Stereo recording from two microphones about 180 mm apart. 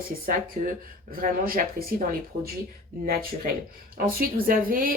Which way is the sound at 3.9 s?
55° right (ahead or behind).